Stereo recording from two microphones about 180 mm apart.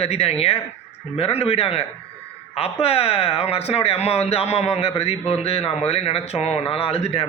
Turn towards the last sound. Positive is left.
turn(degrees=35)  # may be behind; listen again after turning